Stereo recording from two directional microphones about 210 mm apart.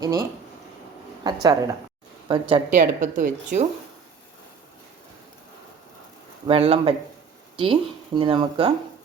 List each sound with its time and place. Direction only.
0.0 s speech: 15° right (ahead or behind)
2.6 s a woman's voice: 35° right (ahead or behind)
6.5 s speech: 25° right (ahead or behind)